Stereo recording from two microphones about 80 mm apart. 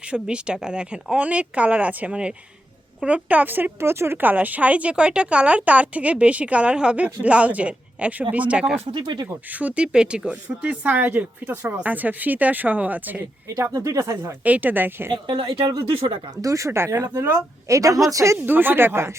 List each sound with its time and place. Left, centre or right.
0.1 s speech: centre
8.9 s speech: right
9.2 s speech: right
9.6 s speech: centre
13.5 s speech: right
14.4 s speech: right
15.1 s speech: right
16.4 s speech: right
17.7 s a woman's voice: right
18.3 s speech: right